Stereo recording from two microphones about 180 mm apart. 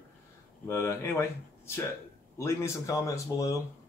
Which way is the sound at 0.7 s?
15° left (ahead or behind).